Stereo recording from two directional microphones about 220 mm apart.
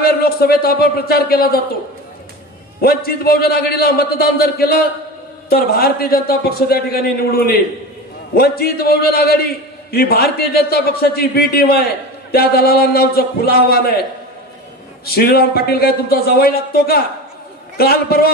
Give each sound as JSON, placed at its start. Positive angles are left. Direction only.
{"t": 0.0, "sound": "a man's voice", "side_deg": 45}
{"t": 2.8, "sound": "a man's voice", "side_deg": 45}
{"t": 15.0, "sound": "a man's voice", "side_deg": 45}